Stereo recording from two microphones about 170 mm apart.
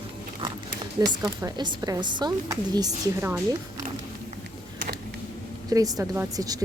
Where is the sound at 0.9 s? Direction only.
20° right (ahead or behind).